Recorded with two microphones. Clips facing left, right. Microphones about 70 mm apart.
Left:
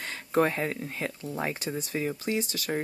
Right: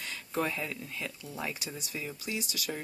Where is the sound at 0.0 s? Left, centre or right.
Left.